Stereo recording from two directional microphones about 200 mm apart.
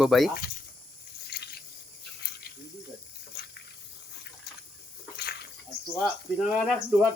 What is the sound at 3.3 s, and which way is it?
Water, 50° left (ahead or behind).